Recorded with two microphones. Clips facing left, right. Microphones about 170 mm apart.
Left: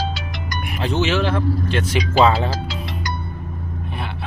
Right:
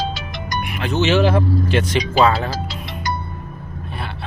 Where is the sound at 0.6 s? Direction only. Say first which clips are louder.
Left 1 dB; 35° left (ahead or behind).